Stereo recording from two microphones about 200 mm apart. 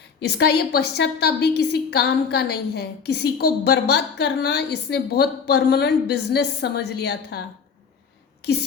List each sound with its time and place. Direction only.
0.2 s a woman's voice: 55° left (ahead or behind)